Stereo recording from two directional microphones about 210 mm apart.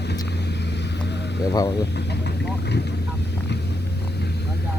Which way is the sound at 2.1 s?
55° left (ahead or behind).